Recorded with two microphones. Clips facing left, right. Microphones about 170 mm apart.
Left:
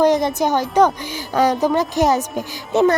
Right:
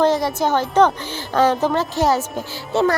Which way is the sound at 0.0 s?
20° left (ahead or behind).